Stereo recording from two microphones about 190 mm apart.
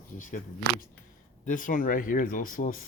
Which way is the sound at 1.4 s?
45° left (ahead or behind).